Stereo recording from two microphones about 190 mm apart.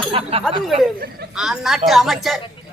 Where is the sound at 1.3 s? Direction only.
Centre (ahead or behind).